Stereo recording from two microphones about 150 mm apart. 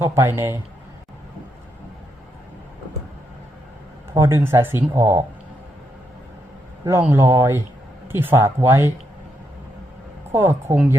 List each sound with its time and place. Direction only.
0.0 s speech: 15° right (ahead or behind)
4.1 s speech: 20° right (ahead or behind)
7.0 s speech: 15° right (ahead or behind)
10.3 s speech: 15° right (ahead or behind)